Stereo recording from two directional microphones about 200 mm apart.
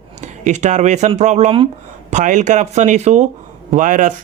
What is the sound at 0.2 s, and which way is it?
Speech, 35° right (ahead or behind).